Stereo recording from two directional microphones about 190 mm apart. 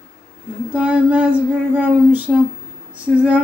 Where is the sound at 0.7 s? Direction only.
5° right (ahead or behind).